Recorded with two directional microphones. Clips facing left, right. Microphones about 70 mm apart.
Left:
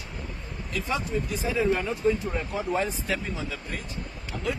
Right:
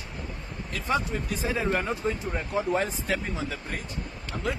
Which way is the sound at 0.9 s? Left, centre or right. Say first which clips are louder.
Right 2 dB; right.